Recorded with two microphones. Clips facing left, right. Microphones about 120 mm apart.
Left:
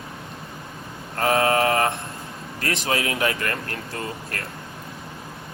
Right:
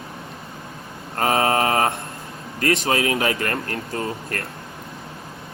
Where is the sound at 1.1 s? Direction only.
50° right (ahead or behind).